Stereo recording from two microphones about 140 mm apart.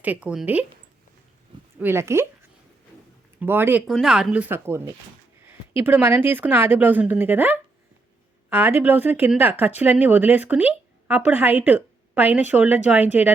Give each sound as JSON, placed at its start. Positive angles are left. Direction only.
{"t": 0.0, "sound": "speech", "side_deg": -10}
{"t": 1.8, "sound": "speech", "side_deg": -20}
{"t": 3.4, "sound": "speech", "side_deg": -15}
{"t": 3.8, "sound": "speech", "side_deg": -5}